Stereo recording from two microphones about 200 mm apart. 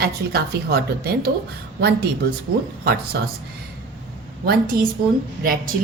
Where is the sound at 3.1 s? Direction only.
60° right (ahead or behind).